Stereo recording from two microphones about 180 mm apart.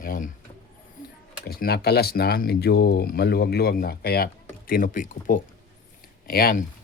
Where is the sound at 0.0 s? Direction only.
50° left (ahead or behind).